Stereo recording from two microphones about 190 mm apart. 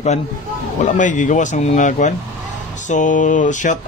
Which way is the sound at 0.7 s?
40° left (ahead or behind).